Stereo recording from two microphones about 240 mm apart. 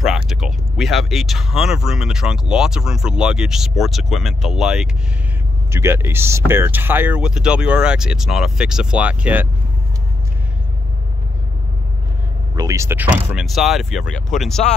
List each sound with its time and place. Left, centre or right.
0.0 s speech: centre
12.5 s speech: centre